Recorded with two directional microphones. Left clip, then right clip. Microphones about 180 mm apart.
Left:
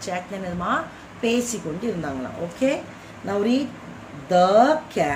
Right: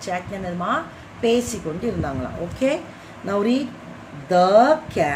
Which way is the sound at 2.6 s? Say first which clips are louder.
Right 1 dB; 15° right (ahead or behind).